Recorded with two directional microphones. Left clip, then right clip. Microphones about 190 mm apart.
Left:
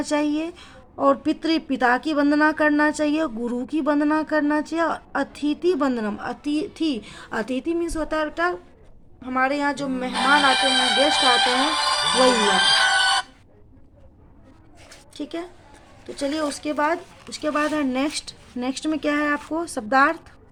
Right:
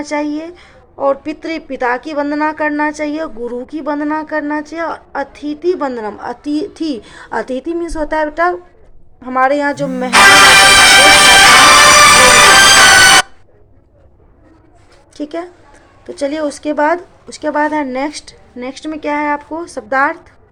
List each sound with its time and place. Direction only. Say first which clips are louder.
0.0 s a woman's voice: right 4 dB; 25° left (ahead or behind); by 10.1 s centre (ahead or behind)
10.1 s music: right 13 dB; 50° right (ahead or behind)
15.1 s a woman's voice: right 9 dB; 5° left (ahead or behind); by 20.2 s 25° left (ahead or behind)